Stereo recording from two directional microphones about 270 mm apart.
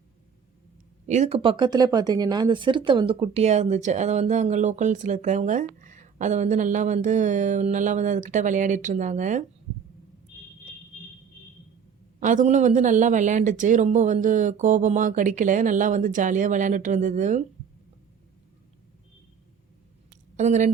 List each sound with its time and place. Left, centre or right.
1.0 s speech: right
12.2 s speech: right
20.1 s a sound: right